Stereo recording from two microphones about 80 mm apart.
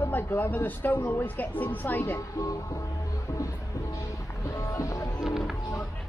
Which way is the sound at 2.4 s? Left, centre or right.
Left.